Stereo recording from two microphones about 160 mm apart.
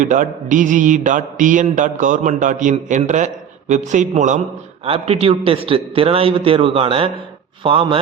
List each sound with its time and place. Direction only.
0.0 s mantra: 55° right (ahead or behind)
4.9 s a man's voice: 40° right (ahead or behind)